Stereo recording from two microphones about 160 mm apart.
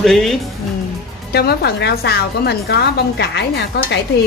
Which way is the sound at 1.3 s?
85° left.